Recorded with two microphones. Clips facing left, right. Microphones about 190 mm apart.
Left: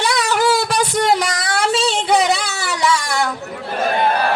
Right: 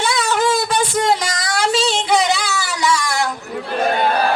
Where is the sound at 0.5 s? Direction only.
70° left (ahead or behind).